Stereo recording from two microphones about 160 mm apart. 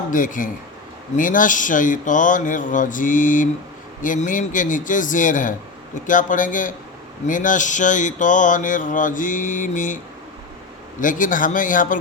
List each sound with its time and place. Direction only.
0.1 s speech: 55° left (ahead or behind)
7.3 s a sound: 55° left (ahead or behind)
11.0 s speech: 55° left (ahead or behind)